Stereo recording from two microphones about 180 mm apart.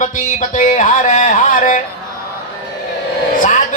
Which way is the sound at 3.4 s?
45° left (ahead or behind).